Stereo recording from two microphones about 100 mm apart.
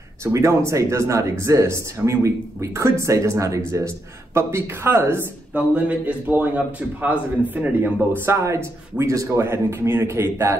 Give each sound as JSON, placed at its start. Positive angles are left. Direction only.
{"t": 0.2, "sound": "speech", "side_deg": -30}
{"t": 5.9, "sound": "a man's voice", "side_deg": -15}